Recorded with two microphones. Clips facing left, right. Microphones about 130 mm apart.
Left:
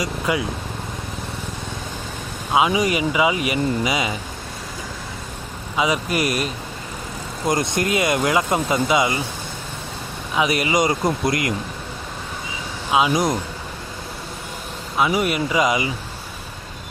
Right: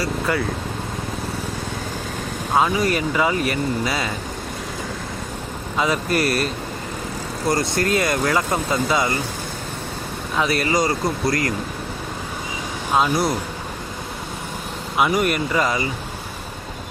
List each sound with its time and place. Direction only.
0.0 s speech: 10° left (ahead or behind)
2.5 s speech: 10° left (ahead or behind)
5.7 s speech: 10° left (ahead or behind)
10.3 s speech: 10° left (ahead or behind)
12.9 s speech: 10° left (ahead or behind)
15.1 s speech: 5° left (ahead or behind)